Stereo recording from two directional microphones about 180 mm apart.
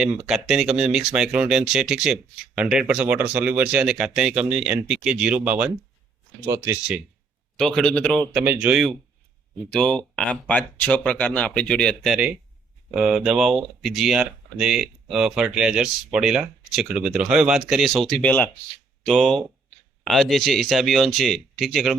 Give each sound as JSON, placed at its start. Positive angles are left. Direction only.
{"t": 0.0, "sound": "speech", "side_deg": -5}
{"t": 7.5, "sound": "speech", "side_deg": 5}
{"t": 9.6, "sound": "speech", "side_deg": 5}